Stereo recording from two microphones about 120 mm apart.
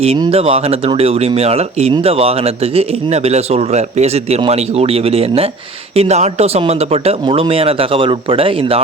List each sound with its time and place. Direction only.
0.3 s a man's voice: 55° right (ahead or behind)
6.0 s a man's voice: 65° right (ahead or behind); by 8.8 s 50° right (ahead or behind)